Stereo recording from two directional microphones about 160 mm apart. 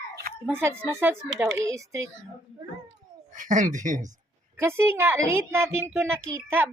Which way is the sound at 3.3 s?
55° right (ahead or behind).